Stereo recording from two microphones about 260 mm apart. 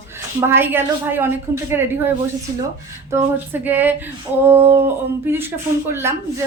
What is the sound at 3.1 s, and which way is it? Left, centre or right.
A woman's voice, centre.